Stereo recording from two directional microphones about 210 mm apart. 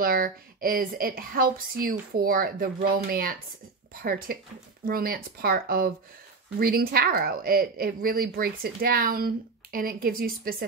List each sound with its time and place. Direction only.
0.0 s speech: 45° right (ahead or behind)